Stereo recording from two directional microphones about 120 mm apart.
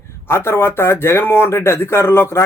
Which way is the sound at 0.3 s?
20° left (ahead or behind).